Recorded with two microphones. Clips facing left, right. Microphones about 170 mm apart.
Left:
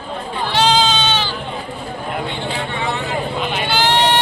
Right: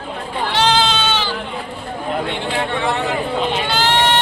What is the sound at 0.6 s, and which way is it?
Goat, 15° left (ahead or behind).